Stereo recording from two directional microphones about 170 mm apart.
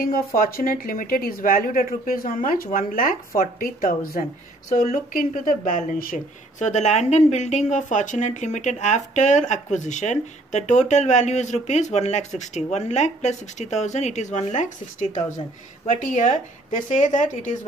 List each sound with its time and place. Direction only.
0.4 s speech: 55° left (ahead or behind)